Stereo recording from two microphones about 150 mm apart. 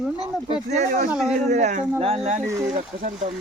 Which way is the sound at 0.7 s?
55° right (ahead or behind).